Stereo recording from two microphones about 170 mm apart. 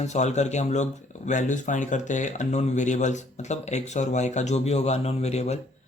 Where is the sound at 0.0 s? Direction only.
40° left (ahead or behind).